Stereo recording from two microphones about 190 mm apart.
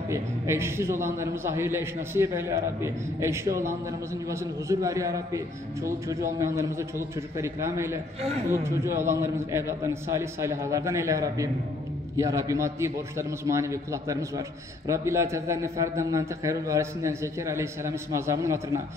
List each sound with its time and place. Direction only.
0.1 s a man's voice: 15° right (ahead or behind)